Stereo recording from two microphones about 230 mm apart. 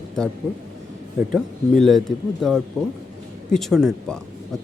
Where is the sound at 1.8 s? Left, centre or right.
Centre.